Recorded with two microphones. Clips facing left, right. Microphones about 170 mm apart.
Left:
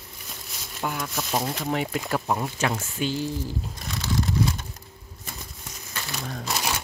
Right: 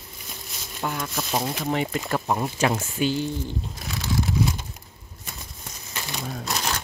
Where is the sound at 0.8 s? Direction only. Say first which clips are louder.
Right 1 dB; centre (ahead or behind).